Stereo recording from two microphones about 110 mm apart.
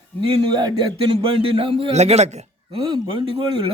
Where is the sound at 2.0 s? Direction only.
80° right.